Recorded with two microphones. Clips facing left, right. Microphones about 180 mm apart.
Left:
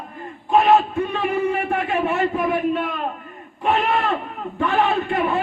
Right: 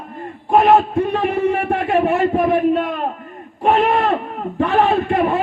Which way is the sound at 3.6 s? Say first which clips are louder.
Right 5 dB; 45° right (ahead or behind).